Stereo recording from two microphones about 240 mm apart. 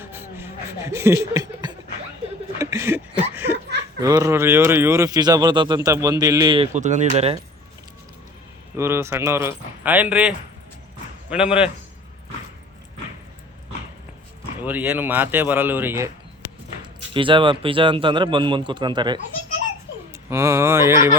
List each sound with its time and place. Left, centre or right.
0.0 s a sound: centre
4.0 s speech: centre
8.7 s a man's voice: centre
14.6 s speech: centre
16.8 s speech: right
20.3 s speech: centre